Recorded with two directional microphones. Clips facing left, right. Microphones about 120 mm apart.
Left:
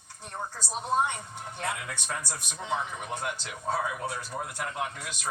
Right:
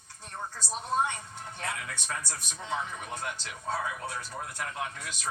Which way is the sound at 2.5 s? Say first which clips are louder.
Left 2 dB; 15° left (ahead or behind).